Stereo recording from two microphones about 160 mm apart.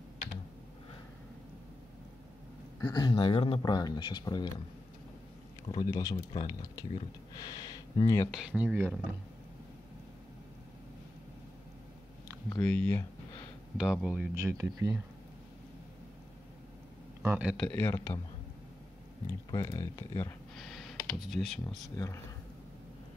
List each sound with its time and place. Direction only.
2.9 s speech: 30° left (ahead or behind)
5.7 s speech: 25° left (ahead or behind)
8.3 s speech: 5° right (ahead or behind)
12.6 s speech: 10° left (ahead or behind)
13.7 s speech: 5° right (ahead or behind)
14.3 s speech: 20° right (ahead or behind)
17.2 s speech: 10° right (ahead or behind)
17.6 s speech: 10° left (ahead or behind)
19.5 s speech: 20° left (ahead or behind)
20.5 s speech: centre (ahead or behind)
21.9 s speech: 20° left (ahead or behind)